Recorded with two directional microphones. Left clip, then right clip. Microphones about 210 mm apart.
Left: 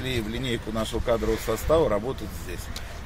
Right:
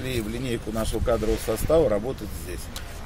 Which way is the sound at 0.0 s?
Centre (ahead or behind).